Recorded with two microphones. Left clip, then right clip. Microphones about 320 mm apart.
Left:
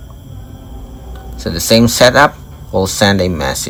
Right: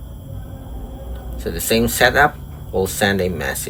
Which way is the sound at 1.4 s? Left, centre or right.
Centre.